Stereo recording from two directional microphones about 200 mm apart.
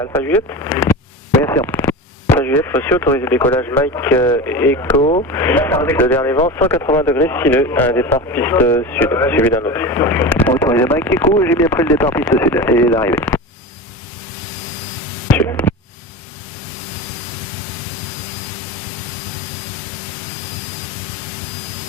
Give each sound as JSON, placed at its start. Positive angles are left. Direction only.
{"t": 0.0, "sound": "speech", "side_deg": 10}
{"t": 4.9, "sound": "speech", "side_deg": 30}
{"t": 5.3, "sound": "speech", "side_deg": 10}
{"t": 15.3, "sound": "hum", "side_deg": 10}